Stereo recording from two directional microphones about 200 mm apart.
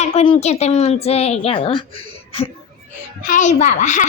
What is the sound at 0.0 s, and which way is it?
A woman's voice, 30° left (ahead or behind).